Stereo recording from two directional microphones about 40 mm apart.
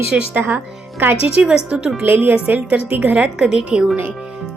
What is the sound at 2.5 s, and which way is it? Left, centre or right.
Speech, right.